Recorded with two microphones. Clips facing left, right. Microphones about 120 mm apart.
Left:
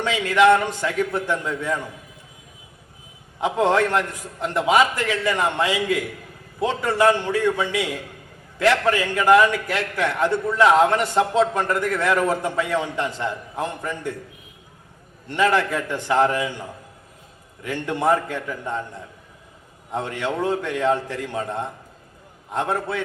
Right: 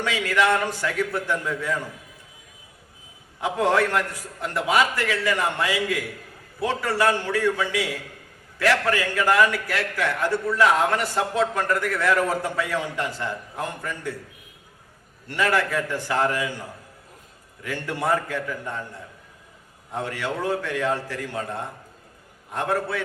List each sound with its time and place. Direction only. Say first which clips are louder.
0.0 s a man's voice: left 5 dB; 20° left (ahead or behind)
3.4 s a man's voice: left 2 dB; 20° left (ahead or behind)
15.3 s a man's voice: left 3 dB; 20° left (ahead or behind)
19.9 s a man's voice: left 3 dB; 20° left (ahead or behind)